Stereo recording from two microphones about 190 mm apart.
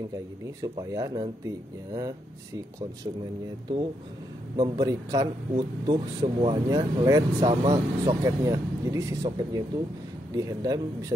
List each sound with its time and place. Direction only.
0.6 s speech: 20° right (ahead or behind)
4.6 s speech: 20° right (ahead or behind)
7.3 s speech: 30° right (ahead or behind)
7.7 s speech: 15° right (ahead or behind)